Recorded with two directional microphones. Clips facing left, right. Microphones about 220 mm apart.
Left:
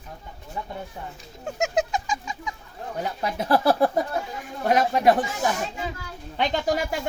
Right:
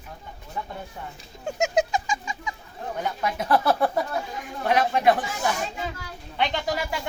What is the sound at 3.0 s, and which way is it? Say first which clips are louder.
Speech: even; 35° left (ahead or behind).